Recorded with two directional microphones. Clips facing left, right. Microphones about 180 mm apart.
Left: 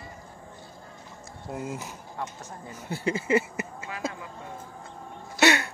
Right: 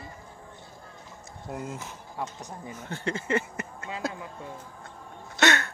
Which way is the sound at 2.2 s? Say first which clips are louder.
Right 1 dB; 15° right (ahead or behind).